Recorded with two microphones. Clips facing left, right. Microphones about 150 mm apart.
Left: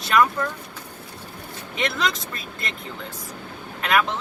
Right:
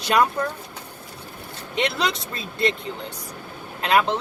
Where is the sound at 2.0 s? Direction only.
30° right (ahead or behind).